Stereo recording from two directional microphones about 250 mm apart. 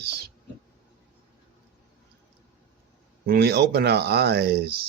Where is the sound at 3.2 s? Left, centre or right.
Right.